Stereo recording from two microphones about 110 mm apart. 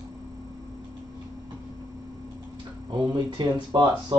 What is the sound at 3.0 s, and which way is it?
Speech, 45° right (ahead or behind).